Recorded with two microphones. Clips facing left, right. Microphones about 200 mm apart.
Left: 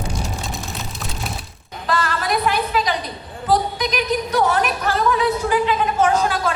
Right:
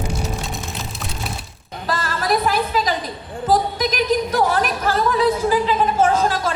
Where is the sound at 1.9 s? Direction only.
40° right (ahead or behind).